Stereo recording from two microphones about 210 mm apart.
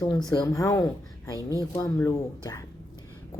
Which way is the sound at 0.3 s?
15° left (ahead or behind).